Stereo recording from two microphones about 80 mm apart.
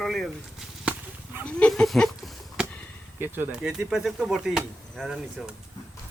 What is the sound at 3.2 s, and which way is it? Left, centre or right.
Speech, right.